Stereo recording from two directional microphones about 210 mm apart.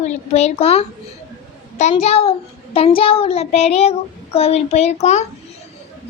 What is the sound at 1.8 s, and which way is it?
Child singing, 30° left (ahead or behind).